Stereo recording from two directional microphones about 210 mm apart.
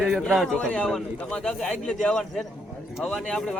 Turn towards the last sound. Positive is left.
turn(degrees=5)  # may be behind; listen again after turning